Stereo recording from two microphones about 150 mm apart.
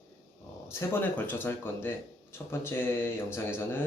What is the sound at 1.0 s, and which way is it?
Speech, 15° left (ahead or behind).